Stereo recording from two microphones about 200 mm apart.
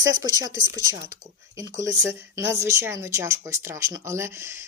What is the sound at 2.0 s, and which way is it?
Speech, 15° right (ahead or behind).